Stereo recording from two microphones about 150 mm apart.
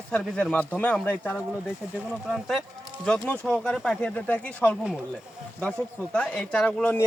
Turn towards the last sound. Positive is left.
turn(degrees=10)  # may be behind; listen again after turning